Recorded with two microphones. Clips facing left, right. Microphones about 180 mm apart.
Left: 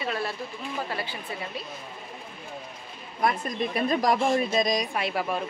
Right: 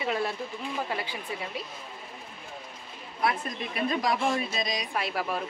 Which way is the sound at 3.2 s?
45° left (ahead or behind).